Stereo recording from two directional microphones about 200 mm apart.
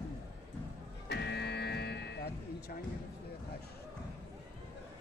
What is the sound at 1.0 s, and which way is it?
Music, 60° left (ahead or behind).